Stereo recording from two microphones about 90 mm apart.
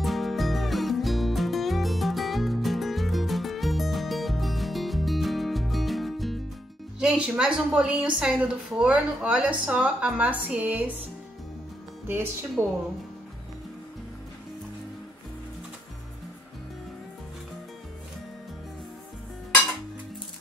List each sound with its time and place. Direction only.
0.0 s music: centre (ahead or behind)
7.0 s a woman's voice: 10° right (ahead or behind)
12.1 s speech: 25° right (ahead or behind)